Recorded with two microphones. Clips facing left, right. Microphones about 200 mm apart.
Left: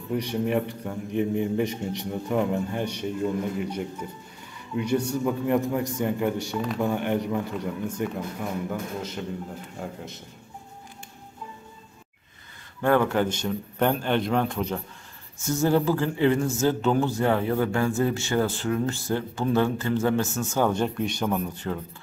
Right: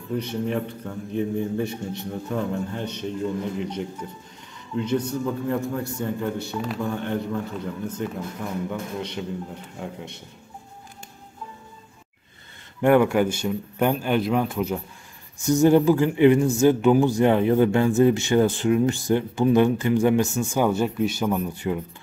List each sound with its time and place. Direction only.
0.1 s a man's voice: 15° left (ahead or behind)
12.8 s a man's voice: 15° right (ahead or behind)
15.3 s a man's voice: 15° right (ahead or behind)